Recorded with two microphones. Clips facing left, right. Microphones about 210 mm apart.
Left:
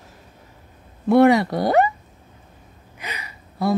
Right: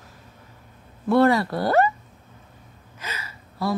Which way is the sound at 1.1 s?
20° left (ahead or behind).